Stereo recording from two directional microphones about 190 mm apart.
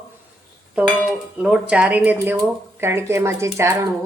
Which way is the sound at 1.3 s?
5° right (ahead or behind).